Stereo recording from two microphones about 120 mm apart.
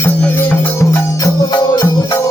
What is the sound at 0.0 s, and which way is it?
Music, 20° left (ahead or behind).